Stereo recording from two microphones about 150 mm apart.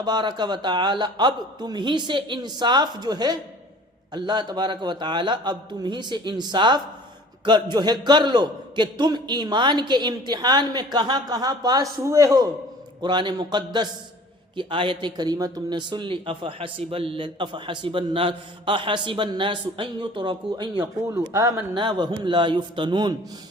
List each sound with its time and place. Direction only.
0.0 s a man's voice: 30° right (ahead or behind)